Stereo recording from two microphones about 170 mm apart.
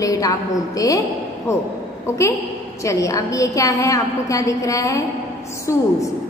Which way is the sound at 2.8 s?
20° left (ahead or behind).